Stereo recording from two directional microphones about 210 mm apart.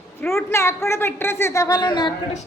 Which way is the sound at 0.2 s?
10° left (ahead or behind).